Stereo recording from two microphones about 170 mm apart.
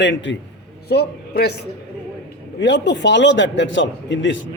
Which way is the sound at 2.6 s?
90° left.